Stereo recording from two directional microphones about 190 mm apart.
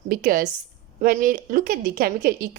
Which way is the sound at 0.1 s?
50° right (ahead or behind).